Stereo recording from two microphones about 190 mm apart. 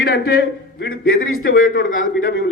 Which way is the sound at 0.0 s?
55° left (ahead or behind).